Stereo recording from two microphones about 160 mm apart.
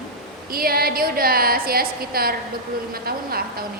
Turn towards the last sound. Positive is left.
turn(degrees=-70)  # may be behind; listen again after turning